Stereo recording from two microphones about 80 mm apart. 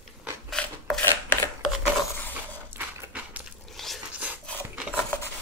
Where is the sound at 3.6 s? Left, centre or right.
Centre.